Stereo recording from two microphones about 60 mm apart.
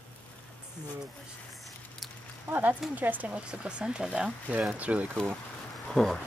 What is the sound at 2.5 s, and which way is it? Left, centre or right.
Speech, right.